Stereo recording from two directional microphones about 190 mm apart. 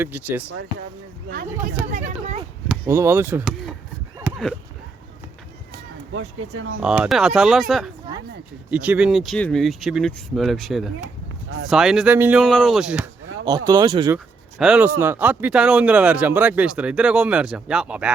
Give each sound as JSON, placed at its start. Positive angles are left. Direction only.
{"t": 0.0, "sound": "speech", "side_deg": -10}
{"t": 1.9, "sound": "speech", "side_deg": -40}
{"t": 2.8, "sound": "speech", "side_deg": -15}
{"t": 4.3, "sound": "a sound", "side_deg": -5}
{"t": 6.1, "sound": "speech", "side_deg": -90}
{"t": 6.7, "sound": "speech", "side_deg": -5}
{"t": 12.4, "sound": "speech", "side_deg": 5}
{"t": 13.4, "sound": "speech", "side_deg": -20}
{"t": 14.6, "sound": "speech", "side_deg": -5}